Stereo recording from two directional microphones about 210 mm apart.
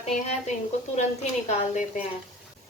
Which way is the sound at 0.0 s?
30° left (ahead or behind).